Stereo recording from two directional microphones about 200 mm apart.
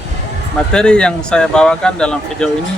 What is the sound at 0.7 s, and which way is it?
Speech, 5° left (ahead or behind).